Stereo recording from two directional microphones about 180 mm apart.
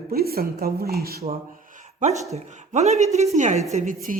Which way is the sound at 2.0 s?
40° right (ahead or behind).